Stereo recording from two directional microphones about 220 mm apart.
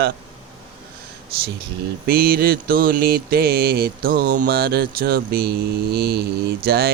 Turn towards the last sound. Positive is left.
turn(degrees=-45)  # may be behind; listen again after turning